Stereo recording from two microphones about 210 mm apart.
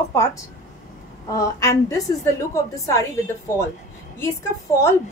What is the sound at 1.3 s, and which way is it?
A woman's voice, 15° left (ahead or behind).